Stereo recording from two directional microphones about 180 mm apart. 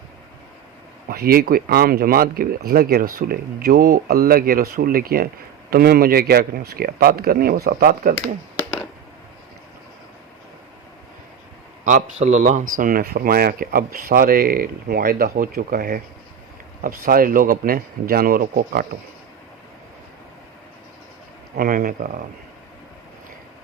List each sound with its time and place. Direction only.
1.0 s speech: 60° right (ahead or behind)
12.2 s speech: 45° right (ahead or behind)
21.6 s speech: 55° right (ahead or behind)